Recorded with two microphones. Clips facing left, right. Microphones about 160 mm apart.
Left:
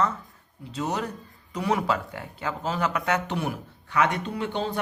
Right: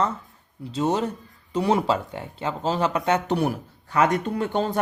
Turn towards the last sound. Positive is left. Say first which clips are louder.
# right 4 dB
turn(degrees=-45)  # may be behind; listen again after turning